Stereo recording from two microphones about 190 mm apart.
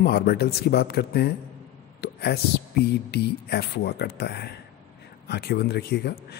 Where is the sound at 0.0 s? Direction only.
55° left (ahead or behind).